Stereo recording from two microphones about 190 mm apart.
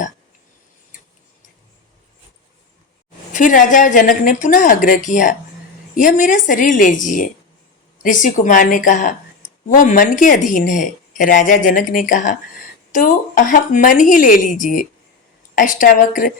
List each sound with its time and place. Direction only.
3.3 s a woman's voice: 45° left (ahead or behind)